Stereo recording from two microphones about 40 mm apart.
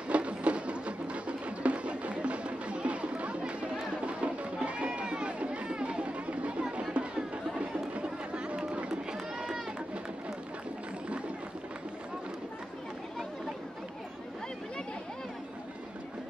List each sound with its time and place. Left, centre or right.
0.1 s music: right
4.0 s run: right
6.6 s music: right